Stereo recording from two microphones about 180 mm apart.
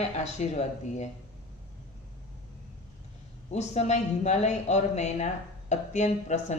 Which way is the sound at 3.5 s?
40° left (ahead or behind).